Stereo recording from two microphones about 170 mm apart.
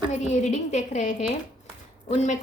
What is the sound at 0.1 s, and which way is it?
Speech, 45° left (ahead or behind).